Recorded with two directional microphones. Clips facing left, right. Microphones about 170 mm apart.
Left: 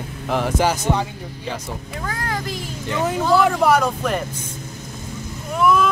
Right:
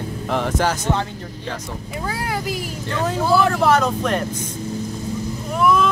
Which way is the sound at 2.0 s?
10° right (ahead or behind).